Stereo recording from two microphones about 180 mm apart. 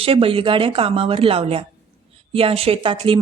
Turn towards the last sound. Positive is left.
turn(degrees=-30)  # may be behind; listen again after turning